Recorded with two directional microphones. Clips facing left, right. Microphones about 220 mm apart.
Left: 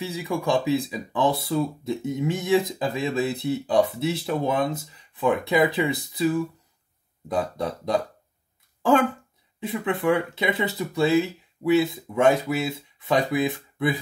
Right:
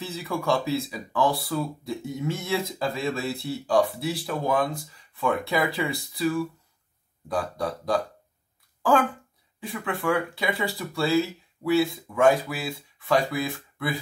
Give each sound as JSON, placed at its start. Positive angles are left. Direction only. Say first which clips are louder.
{"t": 0.0, "sound": "speech", "louder": "left 2 dB", "side_deg": 15}
{"t": 9.6, "sound": "speech", "louder": "left 5 dB", "side_deg": 20}